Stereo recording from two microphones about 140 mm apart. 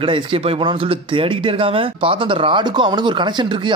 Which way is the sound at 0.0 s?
40° right (ahead or behind).